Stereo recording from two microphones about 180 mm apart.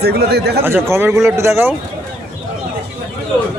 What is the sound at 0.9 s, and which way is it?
Speech, 15° right (ahead or behind).